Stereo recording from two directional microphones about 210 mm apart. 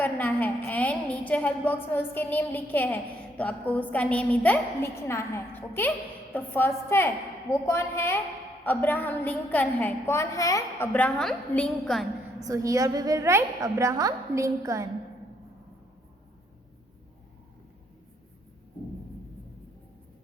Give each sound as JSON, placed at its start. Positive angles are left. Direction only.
{"t": 0.0, "sound": "a woman's voice", "side_deg": 10}
{"t": 12.4, "sound": "a woman's voice", "side_deg": -15}